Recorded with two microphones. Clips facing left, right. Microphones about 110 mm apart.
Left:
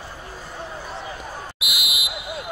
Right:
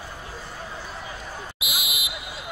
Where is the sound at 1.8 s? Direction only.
60° left (ahead or behind).